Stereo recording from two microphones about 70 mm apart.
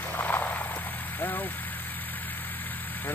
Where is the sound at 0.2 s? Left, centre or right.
Left.